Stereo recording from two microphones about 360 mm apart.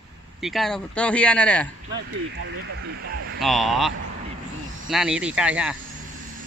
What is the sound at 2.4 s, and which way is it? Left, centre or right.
Speech, right.